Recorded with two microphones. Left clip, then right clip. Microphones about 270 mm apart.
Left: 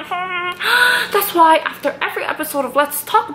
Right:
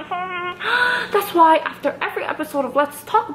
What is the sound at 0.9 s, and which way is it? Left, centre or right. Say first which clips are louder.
A woman's voice: left 3 dB; centre.